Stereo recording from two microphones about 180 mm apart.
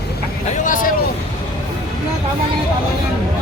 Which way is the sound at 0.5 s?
45° left (ahead or behind).